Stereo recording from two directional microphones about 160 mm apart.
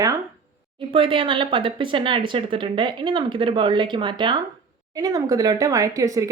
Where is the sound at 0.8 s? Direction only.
35° right (ahead or behind).